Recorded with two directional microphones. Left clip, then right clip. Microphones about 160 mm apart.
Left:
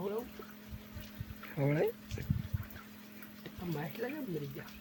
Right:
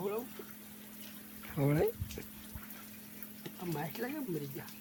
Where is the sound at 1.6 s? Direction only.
35° right (ahead or behind).